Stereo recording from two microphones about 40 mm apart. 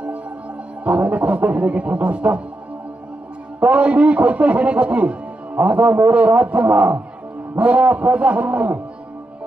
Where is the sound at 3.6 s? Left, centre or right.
Right.